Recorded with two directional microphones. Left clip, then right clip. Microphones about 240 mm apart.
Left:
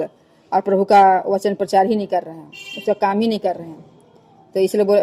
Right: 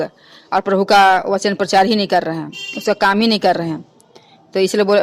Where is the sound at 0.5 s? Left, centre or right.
Centre.